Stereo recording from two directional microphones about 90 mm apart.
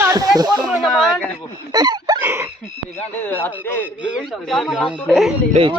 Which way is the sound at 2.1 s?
25° right (ahead or behind).